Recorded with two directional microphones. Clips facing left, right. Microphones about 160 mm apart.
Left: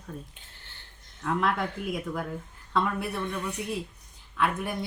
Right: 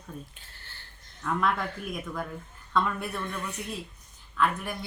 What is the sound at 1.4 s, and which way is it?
Speech, 15° left (ahead or behind).